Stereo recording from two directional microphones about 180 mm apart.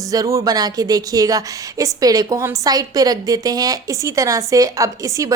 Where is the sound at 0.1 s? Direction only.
20° right (ahead or behind).